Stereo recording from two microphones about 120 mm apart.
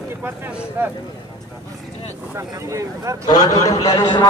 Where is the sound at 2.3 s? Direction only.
25° right (ahead or behind).